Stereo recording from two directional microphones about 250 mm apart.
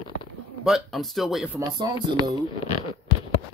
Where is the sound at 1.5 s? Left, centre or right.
Centre.